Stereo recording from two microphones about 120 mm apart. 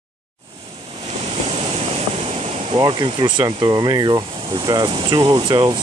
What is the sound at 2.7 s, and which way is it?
Speech, 40° right (ahead or behind).